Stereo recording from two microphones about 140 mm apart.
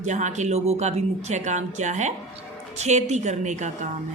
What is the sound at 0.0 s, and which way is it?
Speech, 60° right (ahead or behind).